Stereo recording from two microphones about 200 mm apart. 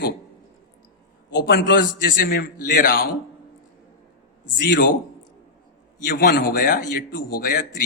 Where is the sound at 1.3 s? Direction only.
55° left (ahead or behind).